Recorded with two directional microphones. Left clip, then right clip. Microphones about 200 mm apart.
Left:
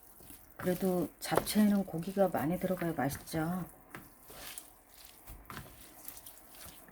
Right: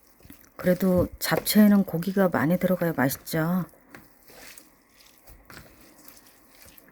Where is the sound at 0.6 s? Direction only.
50° right (ahead or behind).